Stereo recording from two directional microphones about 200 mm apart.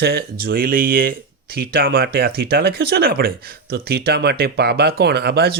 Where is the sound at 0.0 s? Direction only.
50° right (ahead or behind).